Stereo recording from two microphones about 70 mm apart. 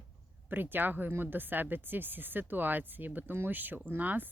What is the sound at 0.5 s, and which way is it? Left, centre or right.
Speech, right.